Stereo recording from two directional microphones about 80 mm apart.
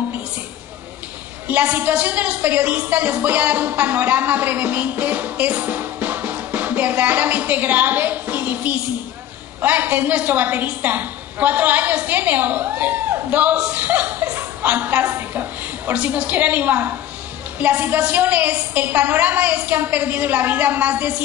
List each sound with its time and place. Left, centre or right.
1.5 s a woman's voice: centre